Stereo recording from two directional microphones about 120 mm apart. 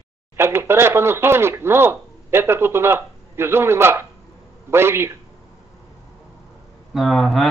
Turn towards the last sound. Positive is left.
turn(degrees=0)  # may be behind; listen again after turning